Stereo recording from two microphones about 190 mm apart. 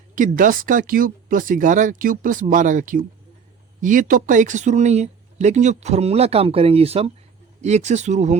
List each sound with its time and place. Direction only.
0.2 s speech: 45° right (ahead or behind)